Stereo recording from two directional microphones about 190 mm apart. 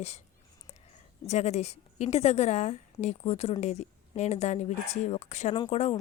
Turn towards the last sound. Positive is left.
turn(degrees=35)  # may be behind; listen again after turning